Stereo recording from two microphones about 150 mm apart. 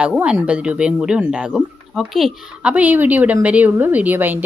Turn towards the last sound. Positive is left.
turn(degrees=-10)  # may be behind; listen again after turning